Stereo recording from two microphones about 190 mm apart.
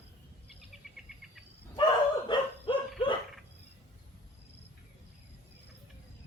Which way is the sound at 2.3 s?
25° left (ahead or behind).